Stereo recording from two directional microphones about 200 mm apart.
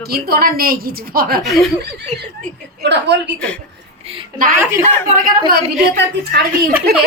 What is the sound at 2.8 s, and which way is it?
Speech, 60° right (ahead or behind).